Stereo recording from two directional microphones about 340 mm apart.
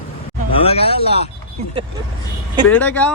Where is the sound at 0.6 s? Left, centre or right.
Centre.